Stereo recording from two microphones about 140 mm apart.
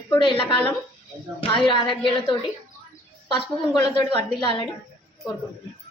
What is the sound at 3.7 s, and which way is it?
Speech, 35° left (ahead or behind).